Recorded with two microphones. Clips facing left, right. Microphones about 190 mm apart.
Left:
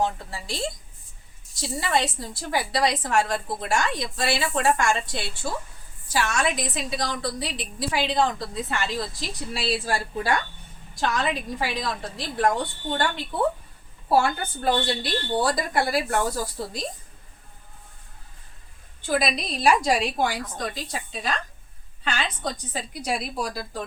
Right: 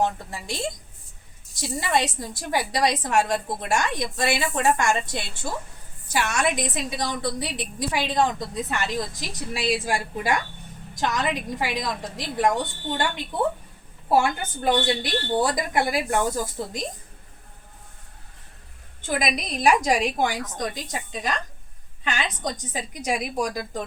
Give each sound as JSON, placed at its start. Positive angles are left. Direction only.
{"t": 0.0, "sound": "a woman's voice", "side_deg": -20}
{"t": 1.8, "sound": "a woman's voice", "side_deg": -20}
{"t": 19.0, "sound": "a woman's voice", "side_deg": -20}